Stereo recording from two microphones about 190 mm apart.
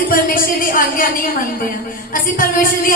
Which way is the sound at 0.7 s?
50° left (ahead or behind).